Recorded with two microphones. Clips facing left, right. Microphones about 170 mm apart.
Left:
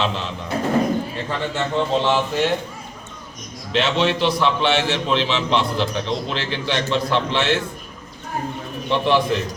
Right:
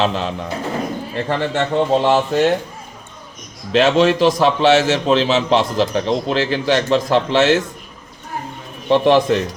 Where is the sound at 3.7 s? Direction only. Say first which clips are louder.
Right 6 dB; 45° right (ahead or behind).